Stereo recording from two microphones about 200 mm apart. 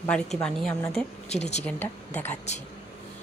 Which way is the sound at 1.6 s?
5° left (ahead or behind).